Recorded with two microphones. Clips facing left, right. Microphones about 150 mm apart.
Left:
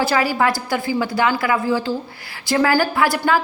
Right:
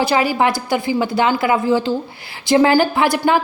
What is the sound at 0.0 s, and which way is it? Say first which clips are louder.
A woman's voice: right 2 dB; 20° right (ahead or behind).